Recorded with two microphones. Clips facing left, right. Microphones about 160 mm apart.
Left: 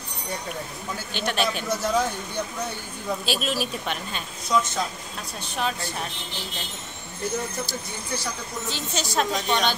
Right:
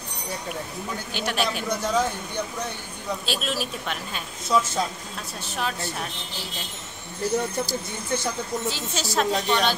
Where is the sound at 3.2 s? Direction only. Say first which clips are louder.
Left 2 dB; centre (ahead or behind).